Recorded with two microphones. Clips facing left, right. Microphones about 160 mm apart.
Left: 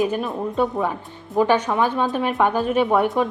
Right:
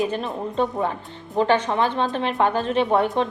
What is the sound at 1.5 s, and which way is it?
A woman's voice, 10° left (ahead or behind).